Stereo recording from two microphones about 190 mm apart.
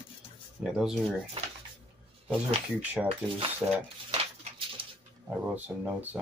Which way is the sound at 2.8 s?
10° right (ahead or behind).